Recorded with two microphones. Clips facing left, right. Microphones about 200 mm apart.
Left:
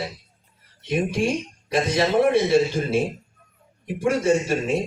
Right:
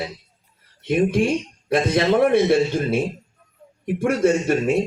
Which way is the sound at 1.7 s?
55° right (ahead or behind).